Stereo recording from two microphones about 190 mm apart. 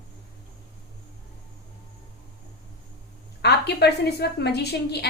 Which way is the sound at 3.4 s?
60° left (ahead or behind).